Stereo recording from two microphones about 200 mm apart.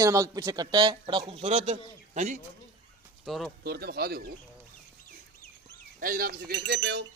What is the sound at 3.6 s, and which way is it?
Speech, 50° right (ahead or behind).